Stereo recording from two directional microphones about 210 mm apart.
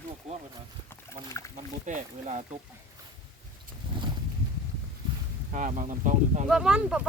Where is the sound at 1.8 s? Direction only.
35° right (ahead or behind).